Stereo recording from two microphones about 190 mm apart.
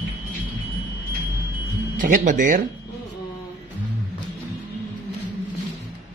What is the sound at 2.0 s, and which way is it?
Speech, 45° right (ahead or behind).